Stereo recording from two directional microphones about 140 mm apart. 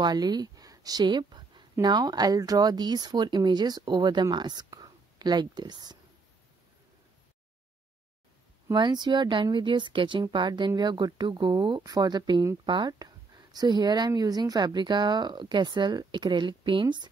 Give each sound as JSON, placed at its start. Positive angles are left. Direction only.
{"t": 0.0, "sound": "speech", "side_deg": -30}
{"t": 8.7, "sound": "speech", "side_deg": -35}